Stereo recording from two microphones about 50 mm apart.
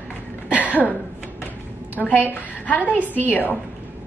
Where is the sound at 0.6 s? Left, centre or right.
Left.